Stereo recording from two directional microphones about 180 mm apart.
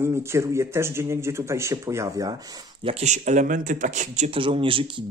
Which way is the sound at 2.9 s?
40° right (ahead or behind).